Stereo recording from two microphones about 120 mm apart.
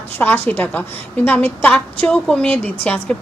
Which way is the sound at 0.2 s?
15° left (ahead or behind).